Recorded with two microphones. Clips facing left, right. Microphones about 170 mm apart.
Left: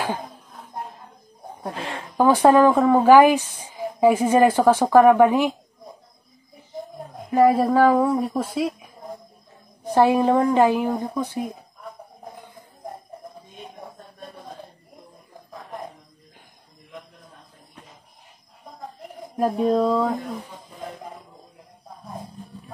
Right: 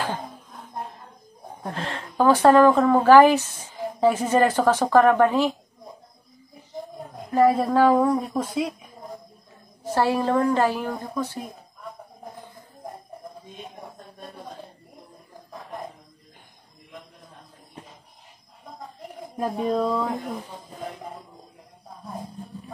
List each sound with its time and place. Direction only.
1.6 s speech: 10° left (ahead or behind)
7.2 s speech: 10° left (ahead or behind)
9.8 s speech: 15° left (ahead or behind)
19.3 s speech: centre (ahead or behind)